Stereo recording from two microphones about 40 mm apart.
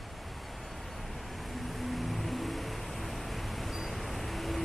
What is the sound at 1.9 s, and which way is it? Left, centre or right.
Vehicle, centre.